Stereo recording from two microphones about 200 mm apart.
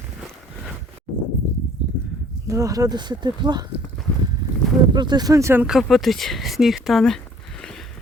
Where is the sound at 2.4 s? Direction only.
15° right (ahead or behind).